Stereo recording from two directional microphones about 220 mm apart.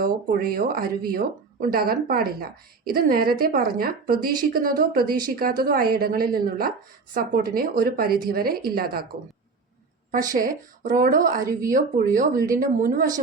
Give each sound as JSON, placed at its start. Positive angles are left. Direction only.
{"t": 0.0, "sound": "a woman's voice", "side_deg": -40}
{"t": 10.3, "sound": "speech", "side_deg": -40}